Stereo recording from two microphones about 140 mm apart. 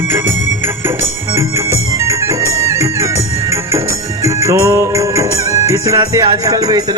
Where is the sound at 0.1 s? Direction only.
15° right (ahead or behind).